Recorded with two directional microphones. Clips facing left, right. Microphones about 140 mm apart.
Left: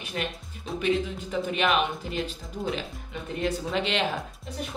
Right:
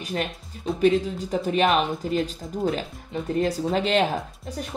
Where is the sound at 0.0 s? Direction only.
40° right (ahead or behind).